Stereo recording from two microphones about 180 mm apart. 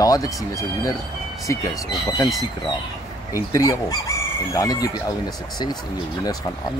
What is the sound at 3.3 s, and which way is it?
Speech, 20° left (ahead or behind).